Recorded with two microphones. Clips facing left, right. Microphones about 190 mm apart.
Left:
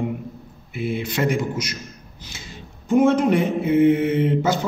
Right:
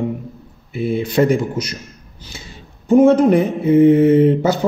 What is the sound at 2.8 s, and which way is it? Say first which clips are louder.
Mantra: right 6 dB; 35° right (ahead or behind).